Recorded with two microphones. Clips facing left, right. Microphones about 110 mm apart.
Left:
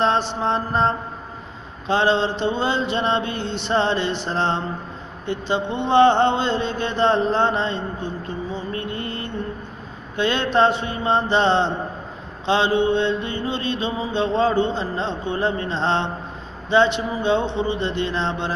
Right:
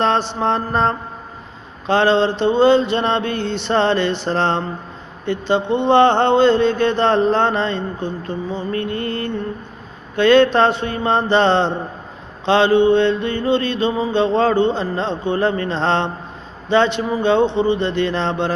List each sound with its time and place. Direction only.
0.0 s mantra: 75° right (ahead or behind)